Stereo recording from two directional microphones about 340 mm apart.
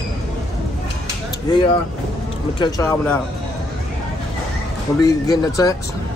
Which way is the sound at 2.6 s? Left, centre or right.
Centre.